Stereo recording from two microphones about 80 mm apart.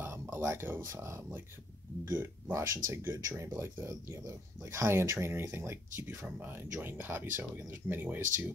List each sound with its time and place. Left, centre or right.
0.0 s speech: right
2.5 s speech: right